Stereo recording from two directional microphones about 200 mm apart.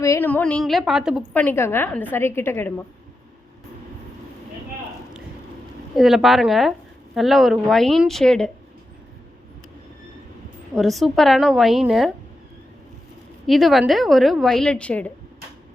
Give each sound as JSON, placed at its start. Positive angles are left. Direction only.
{"t": 0.0, "sound": "speech", "side_deg": 15}
{"t": 1.3, "sound": "a woman's voice", "side_deg": 10}
{"t": 6.0, "sound": "speech", "side_deg": 0}
{"t": 10.8, "sound": "speech", "side_deg": 0}
{"t": 13.5, "sound": "speech", "side_deg": 0}